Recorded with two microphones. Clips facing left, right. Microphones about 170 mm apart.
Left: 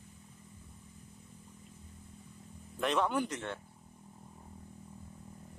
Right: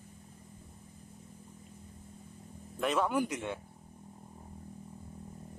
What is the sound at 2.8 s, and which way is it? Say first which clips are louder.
Speech: right 1 dB; 5° right (ahead or behind).